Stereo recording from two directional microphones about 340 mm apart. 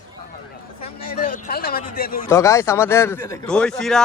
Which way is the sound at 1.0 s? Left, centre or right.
Left.